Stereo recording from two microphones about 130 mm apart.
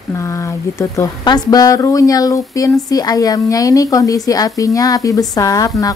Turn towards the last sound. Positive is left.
turn(degrees=25)  # may be behind; listen again after turning